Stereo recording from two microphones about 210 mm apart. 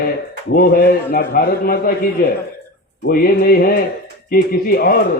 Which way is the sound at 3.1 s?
45° left (ahead or behind).